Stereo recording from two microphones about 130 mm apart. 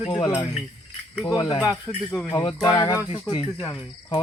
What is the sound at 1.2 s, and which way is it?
Insect, 30° left (ahead or behind).